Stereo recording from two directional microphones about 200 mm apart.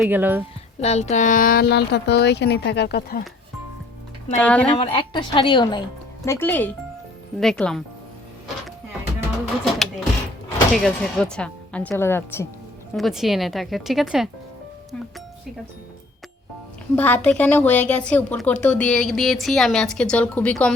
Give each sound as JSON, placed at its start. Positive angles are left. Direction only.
{"t": 0.0, "sound": "speech", "side_deg": -10}
{"t": 0.8, "sound": "speech", "side_deg": 35}
{"t": 4.4, "sound": "speech", "side_deg": 5}
{"t": 4.8, "sound": "speech", "side_deg": 25}
{"t": 6.2, "sound": "speech", "side_deg": 10}
{"t": 9.7, "sound": "a sound", "side_deg": 0}
{"t": 10.8, "sound": "speech", "side_deg": 0}
{"t": 13.0, "sound": "speech", "side_deg": 0}
{"t": 16.9, "sound": "speech", "side_deg": 10}